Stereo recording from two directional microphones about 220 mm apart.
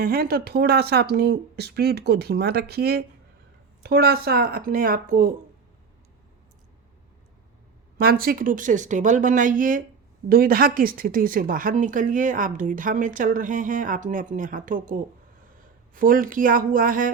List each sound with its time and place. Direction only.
0.0 s speech: 40° right (ahead or behind)
7.9 s speech: 40° right (ahead or behind)